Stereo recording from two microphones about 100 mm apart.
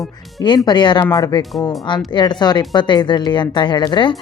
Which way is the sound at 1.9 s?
50° left (ahead or behind).